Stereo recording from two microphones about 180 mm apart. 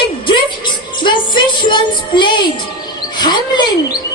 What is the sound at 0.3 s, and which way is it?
Music, 25° left (ahead or behind).